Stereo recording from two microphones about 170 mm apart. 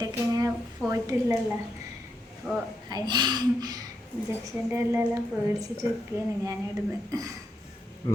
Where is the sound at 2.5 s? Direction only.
Centre (ahead or behind).